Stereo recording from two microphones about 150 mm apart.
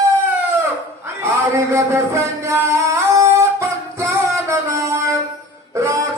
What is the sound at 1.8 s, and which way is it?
Music, 15° right (ahead or behind).